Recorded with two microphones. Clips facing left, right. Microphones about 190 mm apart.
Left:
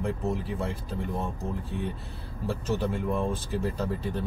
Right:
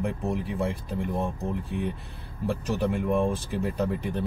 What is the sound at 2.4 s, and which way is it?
Speech, 15° right (ahead or behind).